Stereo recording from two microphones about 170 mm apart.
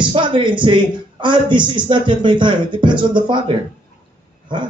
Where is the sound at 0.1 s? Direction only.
30° right (ahead or behind).